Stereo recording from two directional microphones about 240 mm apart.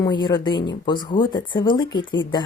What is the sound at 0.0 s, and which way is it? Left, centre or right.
Speech, centre.